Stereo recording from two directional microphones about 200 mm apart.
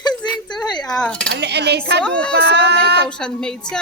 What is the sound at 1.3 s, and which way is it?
Dishes, 60° right (ahead or behind).